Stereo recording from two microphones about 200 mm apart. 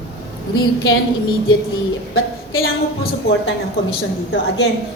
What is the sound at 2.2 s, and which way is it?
Speech, 90° left.